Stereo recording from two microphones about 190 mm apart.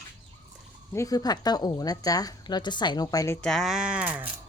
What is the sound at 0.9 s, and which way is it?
A woman's voice, 15° left (ahead or behind).